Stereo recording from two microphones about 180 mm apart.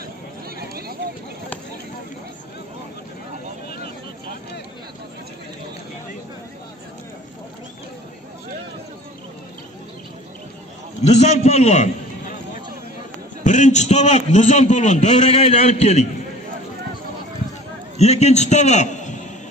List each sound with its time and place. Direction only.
11.0 s a man's voice: 40° left (ahead or behind)
13.4 s a man's voice: 40° left (ahead or behind)
17.9 s a man's voice: 35° left (ahead or behind)